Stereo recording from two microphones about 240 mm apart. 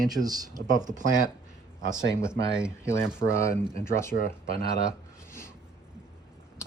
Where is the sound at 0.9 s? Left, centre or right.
Right.